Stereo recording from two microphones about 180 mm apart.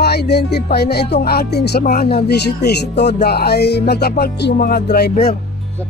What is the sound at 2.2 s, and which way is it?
Speech, 65° left (ahead or behind).